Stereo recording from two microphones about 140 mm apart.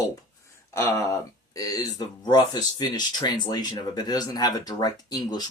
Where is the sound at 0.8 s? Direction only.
20° left (ahead or behind).